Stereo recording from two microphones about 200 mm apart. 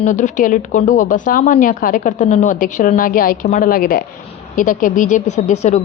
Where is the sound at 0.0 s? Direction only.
40° left (ahead or behind).